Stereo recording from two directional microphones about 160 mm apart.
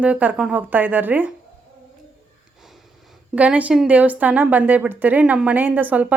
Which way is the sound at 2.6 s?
Centre (ahead or behind).